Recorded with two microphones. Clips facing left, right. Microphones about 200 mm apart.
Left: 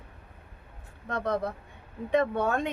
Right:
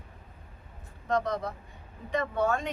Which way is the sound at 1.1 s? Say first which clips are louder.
Even; 60° left (ahead or behind).